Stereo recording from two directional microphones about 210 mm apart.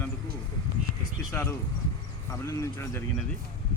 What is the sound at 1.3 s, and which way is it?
Speech, 10° left (ahead or behind).